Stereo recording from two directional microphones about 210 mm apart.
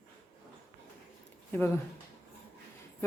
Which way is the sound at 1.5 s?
10° left (ahead or behind).